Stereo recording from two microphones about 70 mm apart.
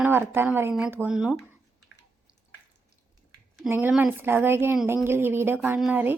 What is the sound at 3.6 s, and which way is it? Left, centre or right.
Speech, right.